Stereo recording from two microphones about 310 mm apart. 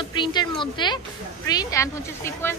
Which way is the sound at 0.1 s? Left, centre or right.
Centre.